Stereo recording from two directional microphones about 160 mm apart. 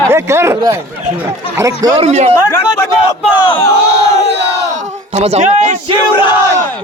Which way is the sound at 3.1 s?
30° left (ahead or behind).